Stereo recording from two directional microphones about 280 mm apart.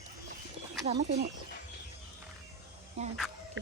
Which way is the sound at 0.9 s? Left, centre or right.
Right.